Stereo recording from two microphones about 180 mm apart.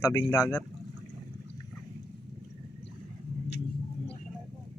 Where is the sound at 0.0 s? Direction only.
20° left (ahead or behind).